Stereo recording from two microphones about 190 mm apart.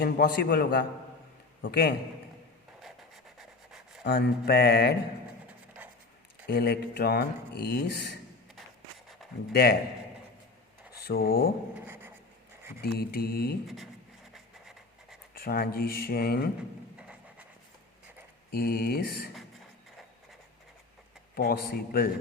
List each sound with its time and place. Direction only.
0.0 s speech: 50° left (ahead or behind)
3.3 s rub: centre (ahead or behind)
4.0 s speech: 55° left (ahead or behind)
6.5 s speech: 55° left (ahead or behind)
9.5 s speech: 55° left (ahead or behind)
10.9 s speech: 55° left (ahead or behind)
12.8 s speech: 55° left (ahead or behind)
15.4 s speech: 55° left (ahead or behind)
17.0 s a sound: 5° right (ahead or behind)
18.5 s speech: 50° left (ahead or behind)
21.3 s speech: 50° left (ahead or behind)